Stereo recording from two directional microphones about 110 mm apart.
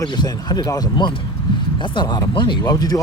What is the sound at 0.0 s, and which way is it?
Speech, 40° left (ahead or behind).